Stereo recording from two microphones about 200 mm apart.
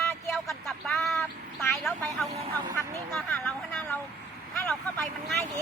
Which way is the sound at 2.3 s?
30° right (ahead or behind).